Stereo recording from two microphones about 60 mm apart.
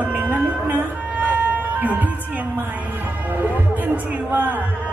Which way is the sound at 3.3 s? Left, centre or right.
Right.